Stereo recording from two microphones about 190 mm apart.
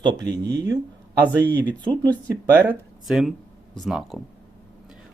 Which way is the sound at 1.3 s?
10° left (ahead or behind).